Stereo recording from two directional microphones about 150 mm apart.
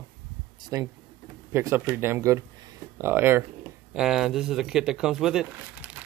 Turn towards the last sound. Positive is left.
turn(degrees=-10)  # may be behind; listen again after turning